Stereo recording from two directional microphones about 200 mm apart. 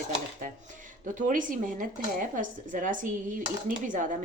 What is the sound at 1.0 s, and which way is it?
Speech, 40° right (ahead or behind).